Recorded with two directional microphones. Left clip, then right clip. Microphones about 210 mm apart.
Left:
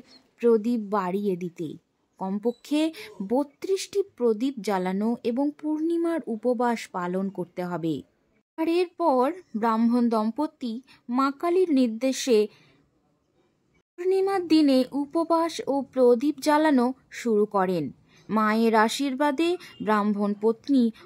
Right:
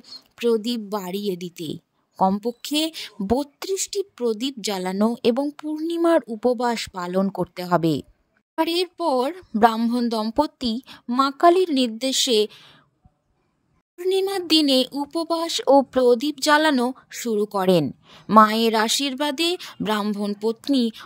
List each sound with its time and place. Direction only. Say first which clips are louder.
0.1 s a sound: right 13 dB; 30° right (ahead or behind)
0.6 s a woman's voice: right 1 dB; 40° right (ahead or behind)
0.8 s a woman's voice: left 2 dB; centre (ahead or behind)
1.1 s a woman's voice: right 1 dB; 40° right (ahead or behind)
14.0 s a woman's voice: right 1 dB; 40° right (ahead or behind)
17.2 s speech: even; 10° right (ahead or behind)
17.6 s a woman's voice: right 9 dB; 40° right (ahead or behind)
20.2 s speech: even; 10° right (ahead or behind)
20.6 s a woman's voice: right 2 dB; 40° right (ahead or behind)